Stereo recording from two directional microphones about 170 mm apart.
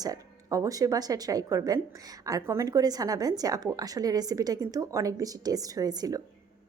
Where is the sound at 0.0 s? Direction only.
20° right (ahead or behind).